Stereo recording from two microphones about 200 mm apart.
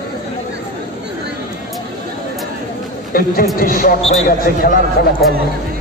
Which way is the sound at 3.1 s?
45° left (ahead or behind).